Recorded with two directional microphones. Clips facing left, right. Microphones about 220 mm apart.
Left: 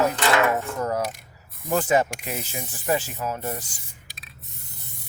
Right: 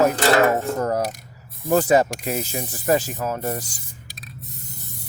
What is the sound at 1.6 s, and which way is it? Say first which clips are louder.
Speech: right 4 dB; 35° right (ahead or behind).